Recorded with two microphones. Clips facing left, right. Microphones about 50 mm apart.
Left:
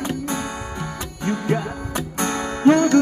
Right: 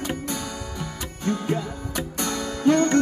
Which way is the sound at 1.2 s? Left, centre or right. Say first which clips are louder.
Left 3 dB; left.